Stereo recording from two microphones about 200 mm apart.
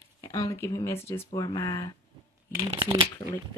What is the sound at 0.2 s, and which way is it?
Speech, 15° left (ahead or behind).